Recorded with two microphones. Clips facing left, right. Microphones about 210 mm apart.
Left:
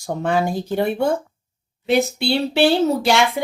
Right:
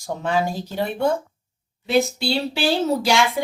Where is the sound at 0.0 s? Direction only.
55° left (ahead or behind).